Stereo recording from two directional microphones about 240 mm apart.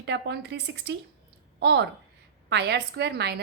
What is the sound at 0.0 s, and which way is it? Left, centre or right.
A woman's voice, right.